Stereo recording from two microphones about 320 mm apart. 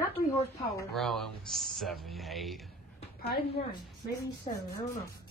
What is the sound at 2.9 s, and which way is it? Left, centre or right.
A woman's voice, centre.